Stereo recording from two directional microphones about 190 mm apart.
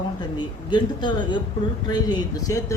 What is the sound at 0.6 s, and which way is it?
A woman's voice, 25° left (ahead or behind).